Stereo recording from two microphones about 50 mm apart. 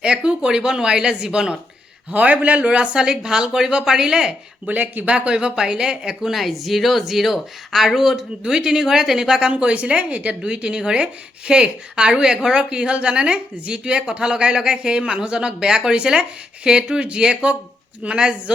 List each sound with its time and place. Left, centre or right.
0.0 s a woman's voice: centre
2.0 s a woman's voice: right; by 4.4 s centre
4.7 s speech: right
5.1 s a woman's voice: centre
9.5 s a woman's voice: right